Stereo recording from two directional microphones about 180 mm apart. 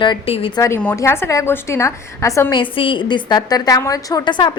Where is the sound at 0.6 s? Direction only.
10° left (ahead or behind).